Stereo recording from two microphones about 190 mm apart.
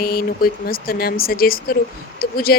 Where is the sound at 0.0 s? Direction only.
55° left (ahead or behind).